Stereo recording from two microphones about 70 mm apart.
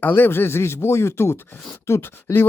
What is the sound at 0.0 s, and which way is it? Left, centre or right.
Speech, left.